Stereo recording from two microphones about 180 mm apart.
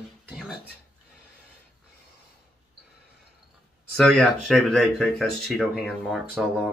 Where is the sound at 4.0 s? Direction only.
Centre (ahead or behind).